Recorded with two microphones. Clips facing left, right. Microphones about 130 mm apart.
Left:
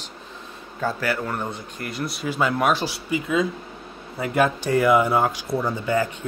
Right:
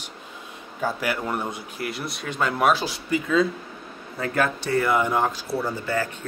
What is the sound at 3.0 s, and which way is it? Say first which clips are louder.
Speech: right 2 dB; 15° left (ahead or behind).